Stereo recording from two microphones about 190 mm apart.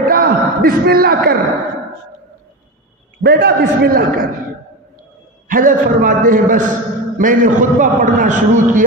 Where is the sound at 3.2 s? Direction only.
60° right (ahead or behind).